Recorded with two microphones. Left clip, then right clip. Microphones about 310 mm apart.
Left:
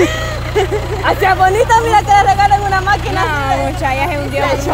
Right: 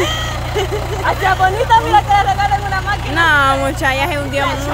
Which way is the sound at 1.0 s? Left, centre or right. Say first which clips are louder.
Left 3 dB; left.